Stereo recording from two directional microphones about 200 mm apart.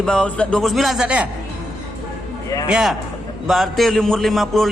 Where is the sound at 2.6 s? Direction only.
5° right (ahead or behind).